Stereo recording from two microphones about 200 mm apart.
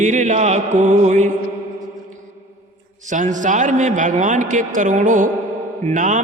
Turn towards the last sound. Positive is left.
turn(degrees=-40)  # may be behind; listen again after turning